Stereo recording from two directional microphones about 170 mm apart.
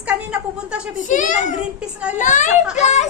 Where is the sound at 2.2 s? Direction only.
45° left (ahead or behind).